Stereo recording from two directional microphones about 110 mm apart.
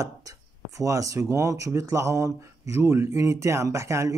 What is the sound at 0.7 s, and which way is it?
Speech, 30° right (ahead or behind).